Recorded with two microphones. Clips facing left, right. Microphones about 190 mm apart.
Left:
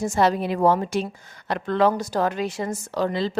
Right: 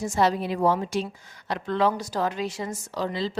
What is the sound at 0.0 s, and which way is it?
A woman's voice, 50° left (ahead or behind).